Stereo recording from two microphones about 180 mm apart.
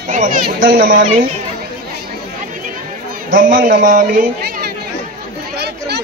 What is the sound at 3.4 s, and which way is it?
A man's voice, 45° right (ahead or behind).